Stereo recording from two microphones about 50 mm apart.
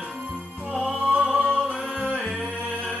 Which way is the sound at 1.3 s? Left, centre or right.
Right.